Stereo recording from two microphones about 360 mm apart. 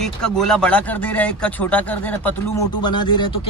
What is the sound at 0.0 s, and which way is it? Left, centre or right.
Speech, centre.